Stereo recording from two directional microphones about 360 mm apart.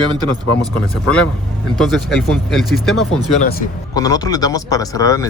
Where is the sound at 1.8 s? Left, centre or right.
Centre.